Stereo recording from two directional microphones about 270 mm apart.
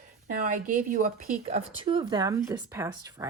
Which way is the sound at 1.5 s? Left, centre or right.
Centre.